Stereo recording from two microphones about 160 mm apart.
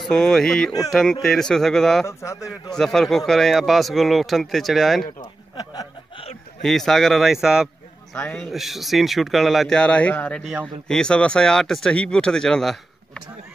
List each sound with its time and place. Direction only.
0.0 s a man's voice: 5° left (ahead or behind)
2.0 s speech: 20° left (ahead or behind)
2.7 s a man's voice: 5° left (ahead or behind)
6.6 s a man's voice: centre (ahead or behind)